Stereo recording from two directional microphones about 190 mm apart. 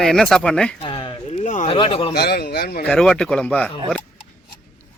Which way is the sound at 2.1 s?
55° left (ahead or behind).